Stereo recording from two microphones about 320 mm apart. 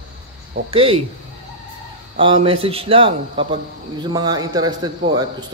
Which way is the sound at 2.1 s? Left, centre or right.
Centre.